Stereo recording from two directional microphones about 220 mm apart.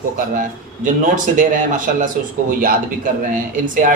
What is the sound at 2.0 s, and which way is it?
A man's voice, 40° right (ahead or behind).